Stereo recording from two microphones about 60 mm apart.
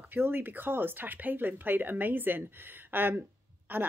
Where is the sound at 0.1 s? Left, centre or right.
Right.